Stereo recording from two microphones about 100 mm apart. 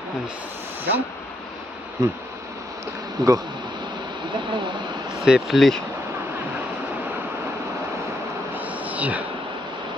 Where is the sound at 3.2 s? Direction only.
35° right (ahead or behind).